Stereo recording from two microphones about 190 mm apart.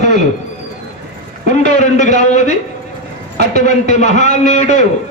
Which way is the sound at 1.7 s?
40° left (ahead or behind).